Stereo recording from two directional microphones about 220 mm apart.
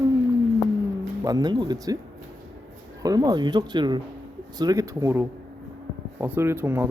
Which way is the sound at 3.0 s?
15° right (ahead or behind).